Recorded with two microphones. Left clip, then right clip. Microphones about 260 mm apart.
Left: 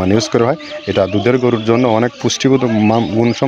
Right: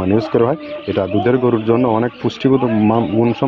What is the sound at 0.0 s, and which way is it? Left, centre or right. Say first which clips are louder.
Speech: left 1 dB; left.